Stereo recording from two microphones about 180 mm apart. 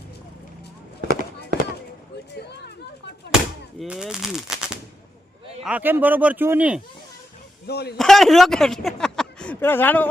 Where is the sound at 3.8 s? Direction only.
Centre (ahead or behind).